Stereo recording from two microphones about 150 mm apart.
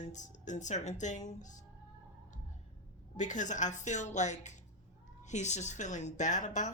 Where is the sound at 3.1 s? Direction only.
55° left (ahead or behind).